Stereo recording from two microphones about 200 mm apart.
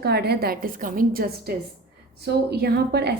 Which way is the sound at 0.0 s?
55° right (ahead or behind).